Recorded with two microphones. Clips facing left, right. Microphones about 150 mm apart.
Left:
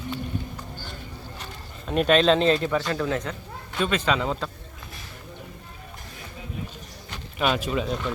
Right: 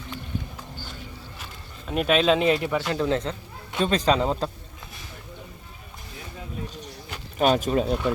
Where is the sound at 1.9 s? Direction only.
5° right (ahead or behind); by 4.5 s 35° right (ahead or behind).